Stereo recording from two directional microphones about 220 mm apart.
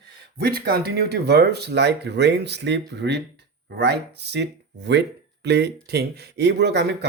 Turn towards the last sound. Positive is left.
turn(degrees=-50)  # may be behind; listen again after turning